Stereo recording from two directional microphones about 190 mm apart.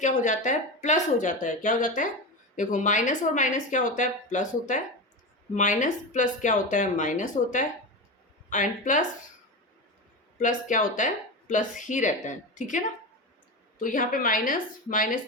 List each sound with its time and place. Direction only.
0.0 s a woman's voice: 40° left (ahead or behind)
10.3 s a woman's voice: 40° left (ahead or behind)